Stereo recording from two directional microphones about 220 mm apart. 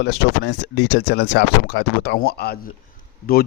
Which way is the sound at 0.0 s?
50° left (ahead or behind).